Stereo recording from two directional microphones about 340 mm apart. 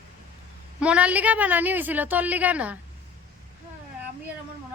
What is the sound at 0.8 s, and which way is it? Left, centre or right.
A woman's voice, centre.